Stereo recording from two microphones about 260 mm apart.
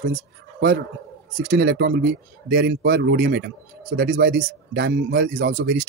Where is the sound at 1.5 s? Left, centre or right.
Right.